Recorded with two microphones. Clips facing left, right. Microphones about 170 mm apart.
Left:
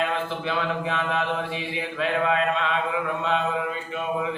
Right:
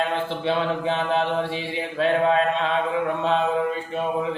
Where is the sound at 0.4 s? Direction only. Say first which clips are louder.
Right 6 dB; 30° right (ahead or behind).